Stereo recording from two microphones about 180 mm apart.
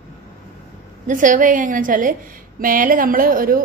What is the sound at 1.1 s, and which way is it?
A woman's voice, 50° right (ahead or behind).